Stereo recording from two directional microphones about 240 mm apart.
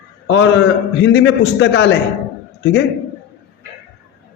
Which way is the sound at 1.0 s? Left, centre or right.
Left.